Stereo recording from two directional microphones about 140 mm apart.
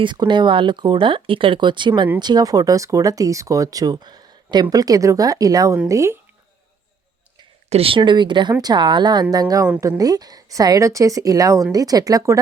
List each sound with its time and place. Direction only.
0.0 s speech: 35° right (ahead or behind)
7.7 s speech: 40° right (ahead or behind); by 12.4 s 25° right (ahead or behind)